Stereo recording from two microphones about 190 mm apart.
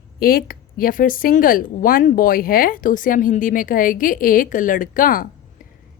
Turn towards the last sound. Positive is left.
turn(degrees=45)  # may be behind; listen again after turning